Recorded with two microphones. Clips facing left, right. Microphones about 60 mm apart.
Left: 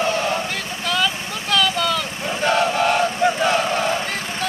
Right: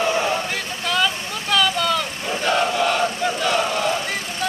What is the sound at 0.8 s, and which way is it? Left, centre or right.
Vehicle, centre.